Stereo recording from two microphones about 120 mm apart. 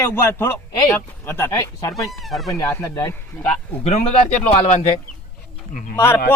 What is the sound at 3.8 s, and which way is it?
Speech, 70° left (ahead or behind).